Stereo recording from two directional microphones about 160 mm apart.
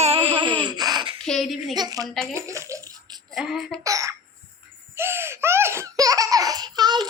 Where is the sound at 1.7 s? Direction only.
25° right (ahead or behind).